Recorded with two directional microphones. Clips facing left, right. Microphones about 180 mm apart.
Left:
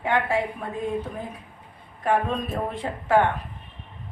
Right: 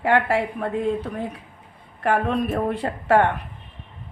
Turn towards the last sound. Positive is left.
turn(degrees=-70)  # may be behind; listen again after turning